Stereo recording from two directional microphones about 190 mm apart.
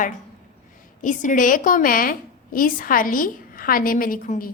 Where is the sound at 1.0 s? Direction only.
40° left (ahead or behind).